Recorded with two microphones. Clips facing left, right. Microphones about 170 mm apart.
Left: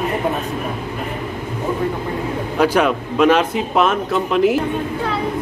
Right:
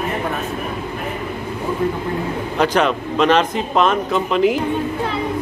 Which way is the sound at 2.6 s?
5° left (ahead or behind).